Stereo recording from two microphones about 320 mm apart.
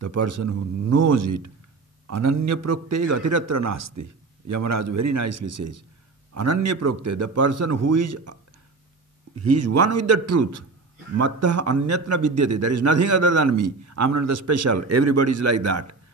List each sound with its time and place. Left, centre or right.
0.0 s a man's voice: right
9.4 s a man's voice: right